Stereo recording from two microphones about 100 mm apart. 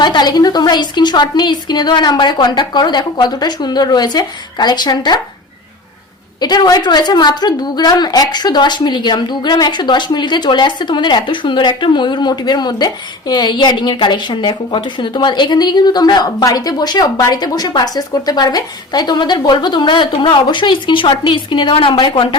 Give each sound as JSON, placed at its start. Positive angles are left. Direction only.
{"t": 0.0, "sound": "a woman's voice", "side_deg": 45}
{"t": 6.4, "sound": "a woman's voice", "side_deg": 45}